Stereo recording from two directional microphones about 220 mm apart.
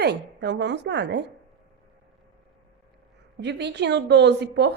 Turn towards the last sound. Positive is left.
turn(degrees=-50)  # may be behind; listen again after turning